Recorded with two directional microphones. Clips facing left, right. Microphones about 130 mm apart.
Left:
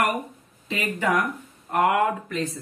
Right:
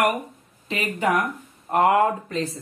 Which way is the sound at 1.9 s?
30° right (ahead or behind).